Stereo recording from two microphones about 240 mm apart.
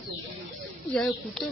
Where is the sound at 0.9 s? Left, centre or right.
Centre.